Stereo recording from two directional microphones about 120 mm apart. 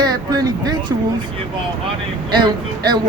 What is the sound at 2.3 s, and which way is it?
Speech, 40° right (ahead or behind).